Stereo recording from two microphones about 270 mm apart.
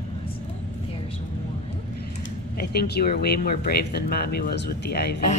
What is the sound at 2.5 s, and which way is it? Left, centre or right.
Speech, left.